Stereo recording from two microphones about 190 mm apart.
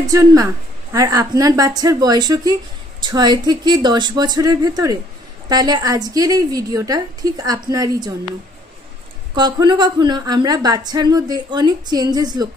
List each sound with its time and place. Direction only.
0.0 s a woman's voice: 20° right (ahead or behind)
9.3 s a woman's voice: 20° right (ahead or behind)